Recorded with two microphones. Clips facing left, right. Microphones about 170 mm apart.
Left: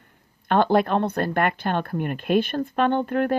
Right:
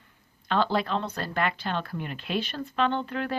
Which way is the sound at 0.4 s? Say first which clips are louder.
Left 7 dB; 55° left (ahead or behind).